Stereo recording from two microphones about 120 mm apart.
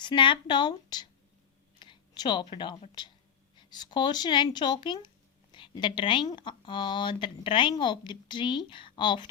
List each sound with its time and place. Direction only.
0.0 s speech: 40° left (ahead or behind)
1.8 s a sound: 40° left (ahead or behind)
3.0 s speech: 35° left (ahead or behind)